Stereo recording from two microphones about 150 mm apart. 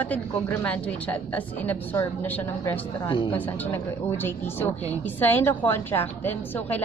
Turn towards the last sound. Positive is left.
turn(degrees=10)  # may be behind; listen again after turning